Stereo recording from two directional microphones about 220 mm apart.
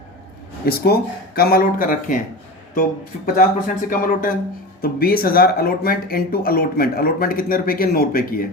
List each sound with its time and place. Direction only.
0.6 s speech: 45° left (ahead or behind)
3.3 s speech: 40° left (ahead or behind)